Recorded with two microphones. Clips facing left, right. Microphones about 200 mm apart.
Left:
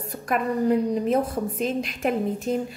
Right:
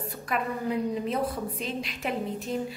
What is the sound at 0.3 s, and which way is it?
A woman's voice, 45° left (ahead or behind).